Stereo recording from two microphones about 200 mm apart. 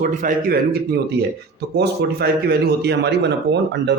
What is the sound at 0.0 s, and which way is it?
Speech, 40° right (ahead or behind).